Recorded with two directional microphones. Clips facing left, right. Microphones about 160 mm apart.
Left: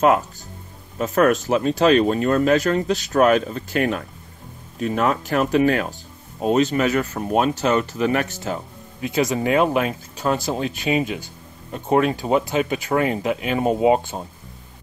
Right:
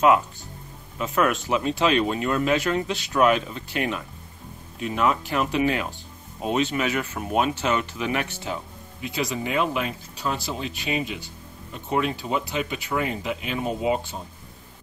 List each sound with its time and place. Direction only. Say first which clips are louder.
0.9 s speech: left 6 dB; 45° left (ahead or behind)